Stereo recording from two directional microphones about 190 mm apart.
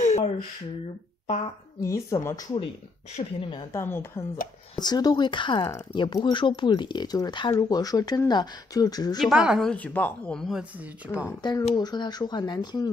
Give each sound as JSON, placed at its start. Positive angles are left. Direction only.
{"t": 0.0, "sound": "a sound", "side_deg": 30}
{"t": 1.8, "sound": "speech", "side_deg": 15}
{"t": 3.7, "sound": "speech", "side_deg": 10}
{"t": 9.2, "sound": "a woman's voice", "side_deg": -5}
{"t": 11.2, "sound": "speech", "side_deg": 20}